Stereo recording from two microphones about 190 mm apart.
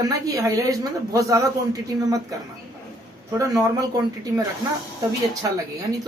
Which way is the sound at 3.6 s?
20° right (ahead or behind).